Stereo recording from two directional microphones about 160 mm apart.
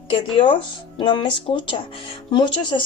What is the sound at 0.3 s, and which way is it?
Speech, 30° left (ahead or behind).